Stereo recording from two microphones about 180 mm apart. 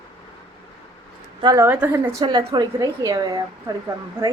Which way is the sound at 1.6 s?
10° right (ahead or behind).